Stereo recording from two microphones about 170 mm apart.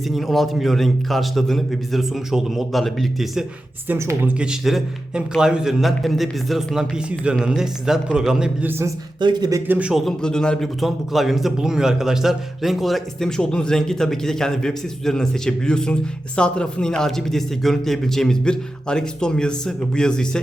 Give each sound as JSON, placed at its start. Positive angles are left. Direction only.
{"t": 0.1, "sound": "a man's voice", "side_deg": 0}
{"t": 3.8, "sound": "speech", "side_deg": -15}
{"t": 4.6, "sound": "a man's voice", "side_deg": 0}
{"t": 9.2, "sound": "speech", "side_deg": -25}
{"t": 9.6, "sound": "a man's voice", "side_deg": -10}